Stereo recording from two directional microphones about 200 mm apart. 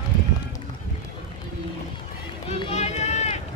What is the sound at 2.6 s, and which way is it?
Run, 35° left (ahead or behind).